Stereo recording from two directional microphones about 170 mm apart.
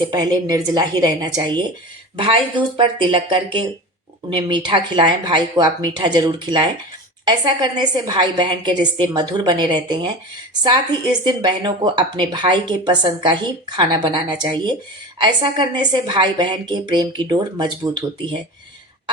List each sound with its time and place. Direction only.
0.0 s speech: 25° right (ahead or behind)
11.3 s speech: 25° right (ahead or behind)